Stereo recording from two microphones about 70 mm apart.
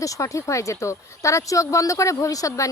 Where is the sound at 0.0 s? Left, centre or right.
Left.